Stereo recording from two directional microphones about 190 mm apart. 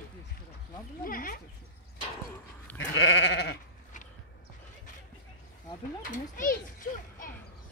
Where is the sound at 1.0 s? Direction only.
45° left (ahead or behind).